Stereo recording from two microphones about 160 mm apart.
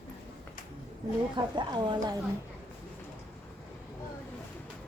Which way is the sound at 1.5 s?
30° right (ahead or behind).